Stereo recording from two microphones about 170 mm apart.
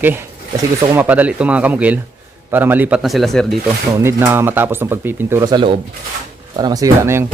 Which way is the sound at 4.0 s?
15° right (ahead or behind).